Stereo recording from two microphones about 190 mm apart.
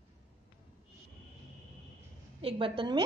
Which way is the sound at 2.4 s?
30° right (ahead or behind).